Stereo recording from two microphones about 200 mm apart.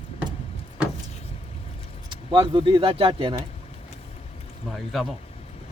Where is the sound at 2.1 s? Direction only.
25° right (ahead or behind).